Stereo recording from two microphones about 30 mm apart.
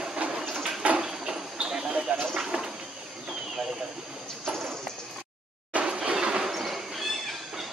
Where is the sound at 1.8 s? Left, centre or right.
Right.